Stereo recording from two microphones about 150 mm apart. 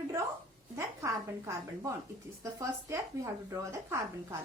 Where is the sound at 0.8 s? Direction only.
20° right (ahead or behind).